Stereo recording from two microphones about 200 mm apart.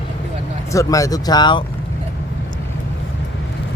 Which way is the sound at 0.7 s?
15° left (ahead or behind).